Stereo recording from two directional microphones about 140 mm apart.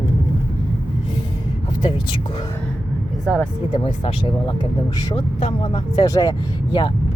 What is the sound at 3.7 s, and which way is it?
Speech, 40° left (ahead or behind).